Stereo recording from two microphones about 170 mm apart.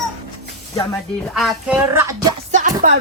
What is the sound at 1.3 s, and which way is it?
Speech, centre (ahead or behind).